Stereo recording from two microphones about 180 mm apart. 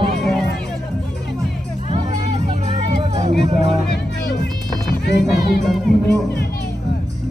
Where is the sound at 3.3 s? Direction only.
65° left (ahead or behind).